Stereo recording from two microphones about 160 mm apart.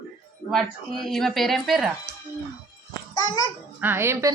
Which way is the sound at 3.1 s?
25° left (ahead or behind).